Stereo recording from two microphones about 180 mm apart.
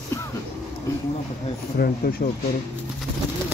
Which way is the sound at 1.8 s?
55° left (ahead or behind).